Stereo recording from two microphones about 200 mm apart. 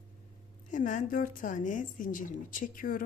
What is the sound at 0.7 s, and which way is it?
A woman's voice, 40° left (ahead or behind).